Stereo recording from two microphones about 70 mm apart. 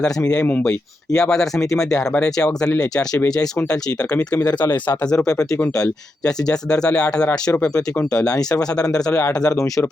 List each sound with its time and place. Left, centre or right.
0.6 s speech: centre
9.5 s speech: left